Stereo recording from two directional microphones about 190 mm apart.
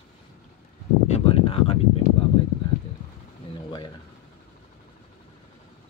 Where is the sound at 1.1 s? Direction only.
30° left (ahead or behind).